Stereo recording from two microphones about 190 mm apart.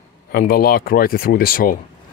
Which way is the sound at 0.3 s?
50° left (ahead or behind).